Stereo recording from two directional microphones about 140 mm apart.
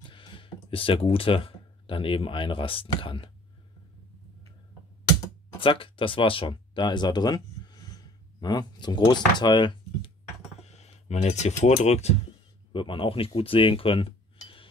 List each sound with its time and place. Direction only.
0.0 s speech: 35° left (ahead or behind)
5.6 s speech: 40° left (ahead or behind)
10.6 s speech: 50° left (ahead or behind)
12.7 s speech: 40° left (ahead or behind)